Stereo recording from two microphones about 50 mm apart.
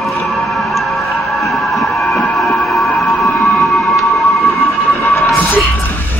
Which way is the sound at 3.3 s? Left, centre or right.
Left.